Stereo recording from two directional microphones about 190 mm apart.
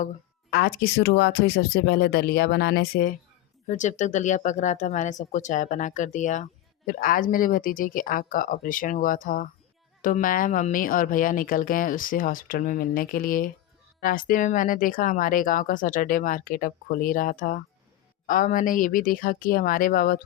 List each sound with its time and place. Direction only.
0.5 s speech: 55° left (ahead or behind)
3.7 s speech: 40° left (ahead or behind)